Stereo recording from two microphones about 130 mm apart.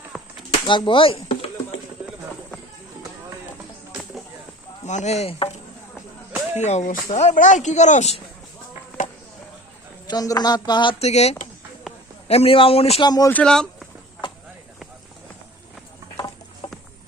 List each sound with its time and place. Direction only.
0.1 s a sound: 5° right (ahead or behind)
0.7 s speech: 40° left (ahead or behind)
4.9 s speech: 60° left (ahead or behind)
6.3 s music: 15° right (ahead or behind)
6.7 s speech: 65° left (ahead or behind)
10.1 s a sound: 30° left (ahead or behind)
11.0 s speech: 55° left (ahead or behind)
13.1 s speech: 30° left (ahead or behind)
13.3 s speech: 5° left (ahead or behind)
16.1 s a sound: 30° left (ahead or behind)